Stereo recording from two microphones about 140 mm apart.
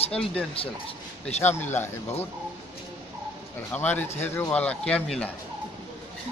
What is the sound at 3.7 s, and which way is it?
Speech, 15° left (ahead or behind).